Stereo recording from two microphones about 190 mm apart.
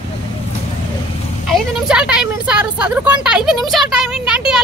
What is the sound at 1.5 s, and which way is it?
Speech, centre (ahead or behind).